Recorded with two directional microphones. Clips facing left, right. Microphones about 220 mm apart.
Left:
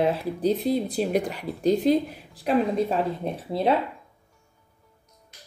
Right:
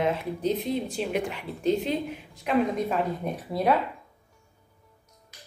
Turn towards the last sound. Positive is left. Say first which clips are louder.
# left 2 dB
turn(degrees=30)  # may be behind; listen again after turning